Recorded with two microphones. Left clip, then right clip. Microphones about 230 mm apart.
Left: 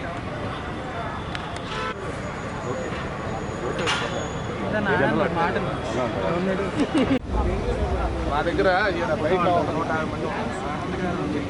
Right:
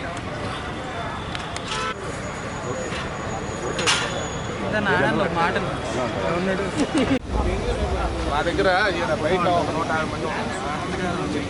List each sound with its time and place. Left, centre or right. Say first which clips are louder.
4.7 s speech: right 1 dB; centre
8.3 s speech: right 1 dB; centre
9.6 s speech: right 1 dB; left
9.9 s speech: right 2 dB; centre